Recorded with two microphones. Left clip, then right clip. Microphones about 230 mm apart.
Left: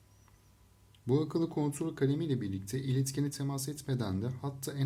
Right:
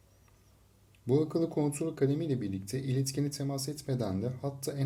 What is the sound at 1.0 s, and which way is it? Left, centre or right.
Speech, left.